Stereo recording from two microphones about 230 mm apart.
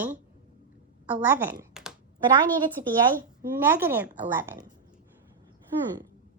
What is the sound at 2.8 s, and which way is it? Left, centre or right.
A woman's voice, centre.